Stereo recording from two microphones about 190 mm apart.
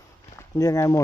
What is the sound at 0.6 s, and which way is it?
Speech, 15° left (ahead or behind).